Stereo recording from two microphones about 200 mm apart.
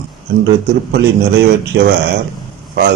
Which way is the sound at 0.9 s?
60° right (ahead or behind).